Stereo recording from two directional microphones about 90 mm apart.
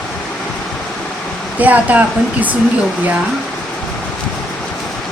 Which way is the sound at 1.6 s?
15° right (ahead or behind).